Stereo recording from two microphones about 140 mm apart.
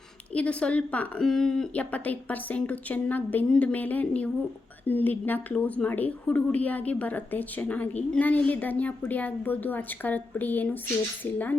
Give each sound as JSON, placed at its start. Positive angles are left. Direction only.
{"t": 0.3, "sound": "a woman's voice", "side_deg": 10}